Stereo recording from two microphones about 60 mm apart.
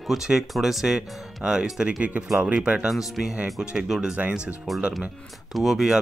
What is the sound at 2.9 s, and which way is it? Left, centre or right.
Speech, centre.